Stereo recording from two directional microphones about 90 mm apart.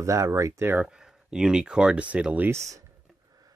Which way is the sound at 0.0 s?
35° right (ahead or behind).